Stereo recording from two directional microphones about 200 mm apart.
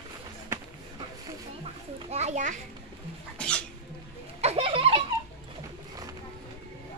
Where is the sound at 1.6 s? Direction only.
35° right (ahead or behind).